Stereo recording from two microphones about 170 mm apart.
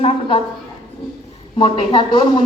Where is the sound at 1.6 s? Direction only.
30° left (ahead or behind).